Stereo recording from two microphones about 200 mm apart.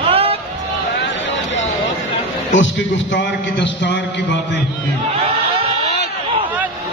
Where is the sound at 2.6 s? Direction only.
65° left (ahead or behind).